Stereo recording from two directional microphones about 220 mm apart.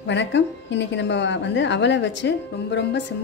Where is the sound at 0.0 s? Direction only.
55° left (ahead or behind).